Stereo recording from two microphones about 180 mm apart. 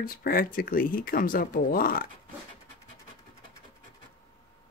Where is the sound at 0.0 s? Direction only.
55° left (ahead or behind).